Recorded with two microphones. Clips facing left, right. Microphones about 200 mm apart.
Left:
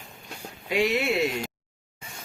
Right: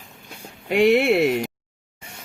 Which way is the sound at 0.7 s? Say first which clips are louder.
Right 8 dB; 60° right (ahead or behind).